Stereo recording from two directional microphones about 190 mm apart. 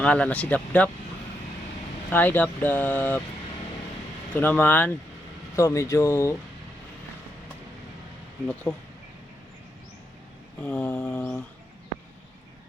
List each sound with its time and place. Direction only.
0.0 s speech: 5° left (ahead or behind)
2.0 s speech: 10° left (ahead or behind)
4.3 s speech: 10° left (ahead or behind)
8.7 s speech: 15° left (ahead or behind)
10.6 s speech: 5° left (ahead or behind)